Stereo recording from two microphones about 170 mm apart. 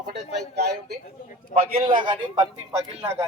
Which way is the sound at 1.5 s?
35° right (ahead or behind).